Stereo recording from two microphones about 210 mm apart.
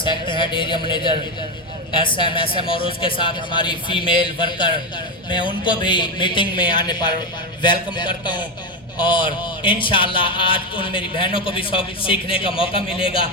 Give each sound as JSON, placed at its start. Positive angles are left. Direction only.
{"t": 0.0, "sound": "speech", "side_deg": 25}